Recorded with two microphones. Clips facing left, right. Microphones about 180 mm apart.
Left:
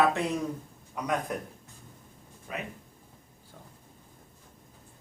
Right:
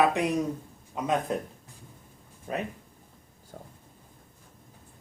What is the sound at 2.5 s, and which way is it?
Speech, 35° right (ahead or behind).